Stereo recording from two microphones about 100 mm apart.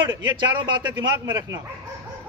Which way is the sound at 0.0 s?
50° right (ahead or behind).